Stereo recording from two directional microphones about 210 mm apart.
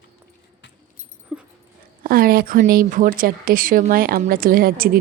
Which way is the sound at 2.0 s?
45° right (ahead or behind).